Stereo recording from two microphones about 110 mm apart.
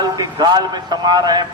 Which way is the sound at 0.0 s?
35° right (ahead or behind).